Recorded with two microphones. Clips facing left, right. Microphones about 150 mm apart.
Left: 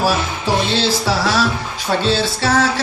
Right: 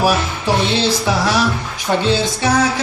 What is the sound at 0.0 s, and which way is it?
Speech, 15° right (ahead or behind).